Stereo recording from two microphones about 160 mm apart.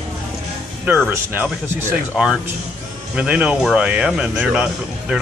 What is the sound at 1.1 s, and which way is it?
Speech, 15° right (ahead or behind).